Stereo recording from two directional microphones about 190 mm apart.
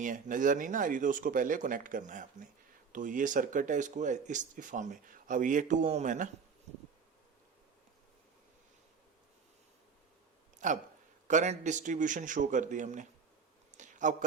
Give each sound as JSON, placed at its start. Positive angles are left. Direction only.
{"t": 0.0, "sound": "speech", "side_deg": -45}
{"t": 10.6, "sound": "speech", "side_deg": -40}
{"t": 13.7, "sound": "a sound", "side_deg": -40}